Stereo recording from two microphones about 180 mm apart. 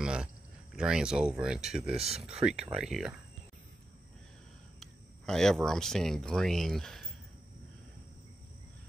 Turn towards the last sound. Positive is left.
turn(degrees=0)  # may be behind; listen again after turning